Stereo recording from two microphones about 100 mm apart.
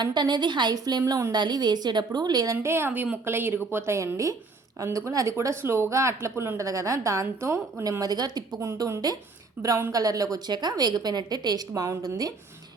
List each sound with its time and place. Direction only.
0.0 s a woman's voice: 45° right (ahead or behind)
2.6 s speech: 25° right (ahead or behind)
9.6 s speech: 20° right (ahead or behind)
9.9 s a woman's voice: 35° right (ahead or behind)